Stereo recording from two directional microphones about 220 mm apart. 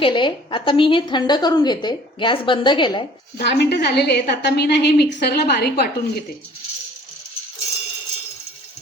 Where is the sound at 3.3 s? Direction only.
50° left (ahead or behind).